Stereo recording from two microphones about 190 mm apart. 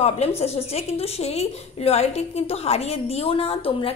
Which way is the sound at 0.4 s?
35° left (ahead or behind).